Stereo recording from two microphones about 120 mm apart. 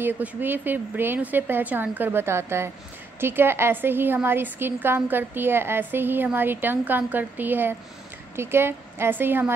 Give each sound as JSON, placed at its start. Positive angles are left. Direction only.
{"t": 0.0, "sound": "a woman's voice", "side_deg": -15}